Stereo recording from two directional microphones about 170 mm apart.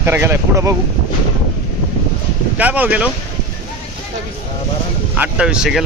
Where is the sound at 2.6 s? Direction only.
10° right (ahead or behind).